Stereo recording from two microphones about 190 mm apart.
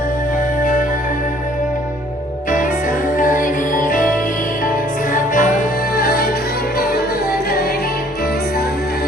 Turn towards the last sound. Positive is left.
turn(degrees=50)  # may be behind; listen again after turning